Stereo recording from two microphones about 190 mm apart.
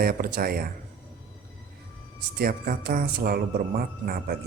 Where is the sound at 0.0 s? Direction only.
55° right (ahead or behind).